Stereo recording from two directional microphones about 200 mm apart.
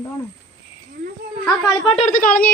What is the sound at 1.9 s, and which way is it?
Speech, 35° left (ahead or behind).